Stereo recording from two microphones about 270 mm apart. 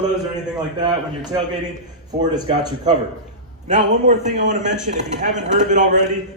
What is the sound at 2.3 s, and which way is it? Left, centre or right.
Speech, centre.